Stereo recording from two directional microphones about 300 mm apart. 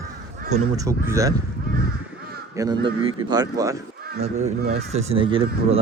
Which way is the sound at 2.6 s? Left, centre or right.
Centre.